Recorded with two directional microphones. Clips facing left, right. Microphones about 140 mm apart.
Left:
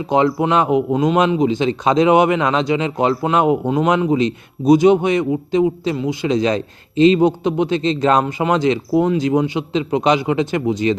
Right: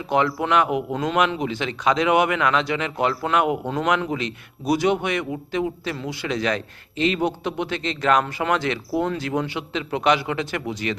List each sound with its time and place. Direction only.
0.1 s a man's voice: 25° left (ahead or behind)